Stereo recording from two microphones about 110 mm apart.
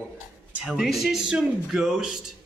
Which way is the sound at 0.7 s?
Centre (ahead or behind).